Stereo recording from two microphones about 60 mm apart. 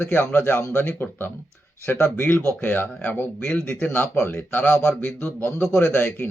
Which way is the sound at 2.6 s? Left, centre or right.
Left.